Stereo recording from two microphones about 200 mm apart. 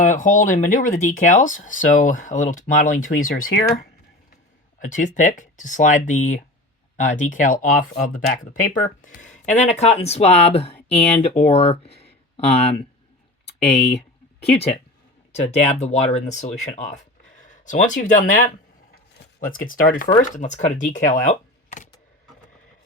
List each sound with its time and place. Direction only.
0.0 s speech: 40° left (ahead or behind)
4.8 s speech: 40° left (ahead or behind)
13.4 s a sound: 30° left (ahead or behind)
14.5 s speech: 30° left (ahead or behind)